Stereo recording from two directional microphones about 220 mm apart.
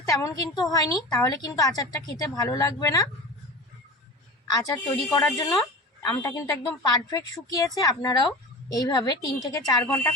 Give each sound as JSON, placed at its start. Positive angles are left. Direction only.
{"t": 0.1, "sound": "a woman's voice", "side_deg": 15}
{"t": 4.6, "sound": "a woman's voice", "side_deg": 15}